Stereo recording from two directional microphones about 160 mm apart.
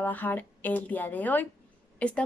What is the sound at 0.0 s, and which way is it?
Speech, 10° left (ahead or behind).